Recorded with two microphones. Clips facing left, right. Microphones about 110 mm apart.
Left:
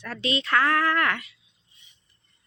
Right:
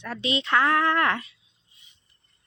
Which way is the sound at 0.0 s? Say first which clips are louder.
Even; 20° right (ahead or behind).